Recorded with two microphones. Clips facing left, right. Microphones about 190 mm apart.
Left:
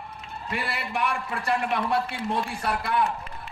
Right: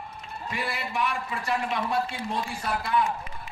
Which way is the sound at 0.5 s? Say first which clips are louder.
Left 1 dB; 60° left (ahead or behind).